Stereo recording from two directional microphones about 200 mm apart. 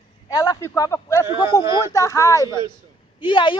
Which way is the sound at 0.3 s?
20° left (ahead or behind).